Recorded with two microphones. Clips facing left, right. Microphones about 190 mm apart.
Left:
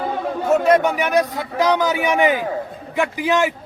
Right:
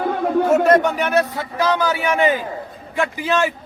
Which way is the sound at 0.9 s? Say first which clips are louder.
Even; 15° left (ahead or behind).